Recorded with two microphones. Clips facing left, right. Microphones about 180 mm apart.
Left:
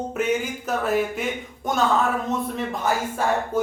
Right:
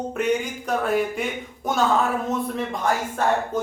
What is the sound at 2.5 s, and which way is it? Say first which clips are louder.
Speech: even; 5° left (ahead or behind).